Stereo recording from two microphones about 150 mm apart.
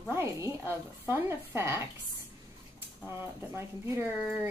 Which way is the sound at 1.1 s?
15° right (ahead or behind).